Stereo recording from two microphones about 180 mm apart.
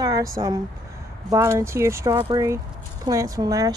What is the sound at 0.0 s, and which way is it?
Speech, 20° right (ahead or behind).